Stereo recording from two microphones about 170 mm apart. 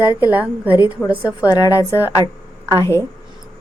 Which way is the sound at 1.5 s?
20° left (ahead or behind).